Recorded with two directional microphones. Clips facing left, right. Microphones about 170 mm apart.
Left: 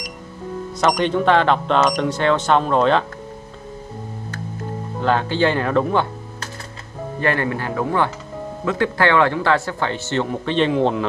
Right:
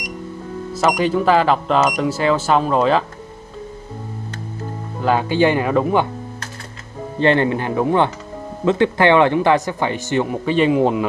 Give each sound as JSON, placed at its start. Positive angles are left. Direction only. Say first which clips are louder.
{"t": 0.7, "sound": "speech", "louder": "right 1 dB", "side_deg": -5}
{"t": 5.0, "sound": "speech", "louder": "right 2 dB", "side_deg": -10}
{"t": 7.2, "sound": "speech", "louder": "right 5 dB", "side_deg": -25}